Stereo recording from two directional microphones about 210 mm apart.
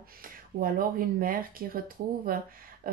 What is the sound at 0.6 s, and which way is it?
Speech, 45° right (ahead or behind).